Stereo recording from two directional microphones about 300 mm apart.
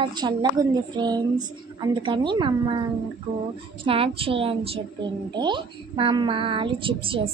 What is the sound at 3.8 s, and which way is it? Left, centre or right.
Speech, centre.